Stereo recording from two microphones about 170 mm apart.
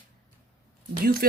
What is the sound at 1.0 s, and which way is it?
Speech, 60° right (ahead or behind).